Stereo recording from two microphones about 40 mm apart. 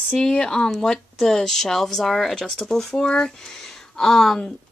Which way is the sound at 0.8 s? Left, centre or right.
Centre.